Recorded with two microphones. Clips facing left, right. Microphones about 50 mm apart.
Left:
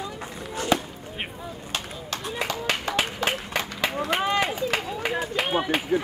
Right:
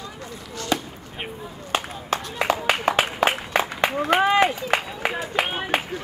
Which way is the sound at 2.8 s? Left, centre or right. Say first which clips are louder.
Right 5 dB; right.